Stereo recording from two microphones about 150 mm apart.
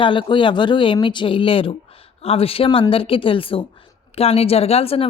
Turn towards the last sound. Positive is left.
turn(degrees=40)  # may be behind; listen again after turning